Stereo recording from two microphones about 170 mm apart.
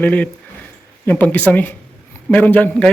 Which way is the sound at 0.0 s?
10° left (ahead or behind).